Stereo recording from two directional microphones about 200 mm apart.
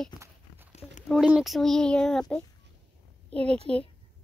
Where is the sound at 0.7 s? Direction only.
35° left (ahead or behind).